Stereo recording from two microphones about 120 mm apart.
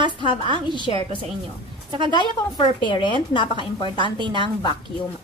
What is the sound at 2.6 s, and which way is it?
Speech, 40° left (ahead or behind).